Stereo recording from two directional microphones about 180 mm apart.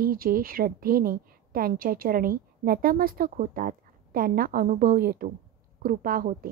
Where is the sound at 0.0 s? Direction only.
55° right (ahead or behind).